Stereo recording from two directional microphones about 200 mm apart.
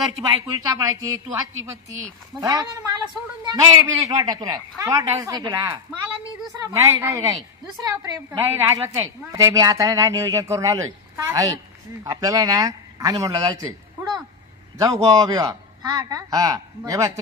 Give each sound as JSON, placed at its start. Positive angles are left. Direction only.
{"t": 0.2, "sound": "a woman's voice", "side_deg": -15}
{"t": 2.4, "sound": "a woman's voice", "side_deg": -20}